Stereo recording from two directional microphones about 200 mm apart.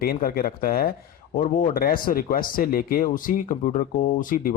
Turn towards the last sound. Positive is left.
turn(degrees=45)  # may be behind; listen again after turning